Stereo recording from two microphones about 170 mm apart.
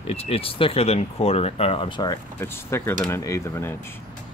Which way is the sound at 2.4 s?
15° left (ahead or behind).